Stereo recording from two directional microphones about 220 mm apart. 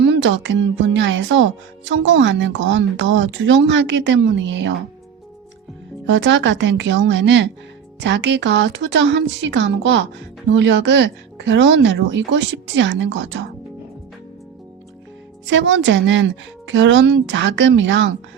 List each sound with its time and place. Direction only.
0.0 s speech: 55° right (ahead or behind)
6.1 s speech: 55° right (ahead or behind)
15.4 s speech: 55° right (ahead or behind)